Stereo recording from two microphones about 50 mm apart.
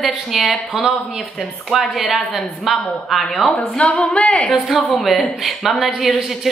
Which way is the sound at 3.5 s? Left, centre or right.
Centre.